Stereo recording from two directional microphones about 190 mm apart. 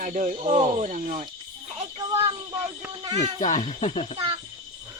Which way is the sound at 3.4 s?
40° left (ahead or behind).